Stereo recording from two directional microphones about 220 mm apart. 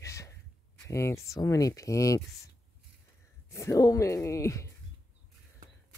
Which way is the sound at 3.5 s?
15° left (ahead or behind).